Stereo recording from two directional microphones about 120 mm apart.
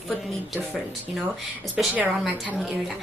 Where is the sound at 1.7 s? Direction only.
10° right (ahead or behind).